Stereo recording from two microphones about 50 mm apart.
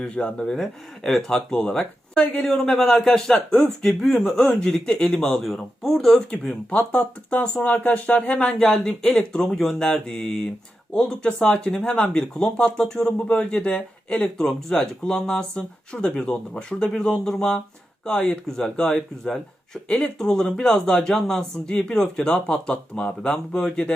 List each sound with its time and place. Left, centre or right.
0.0 s speech: left
0.5 s speech: centre
5.4 s speech: centre
6.7 s speech: left
8.5 s speech: centre